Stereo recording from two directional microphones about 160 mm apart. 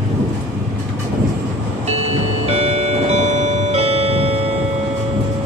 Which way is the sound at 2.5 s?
40° right (ahead or behind).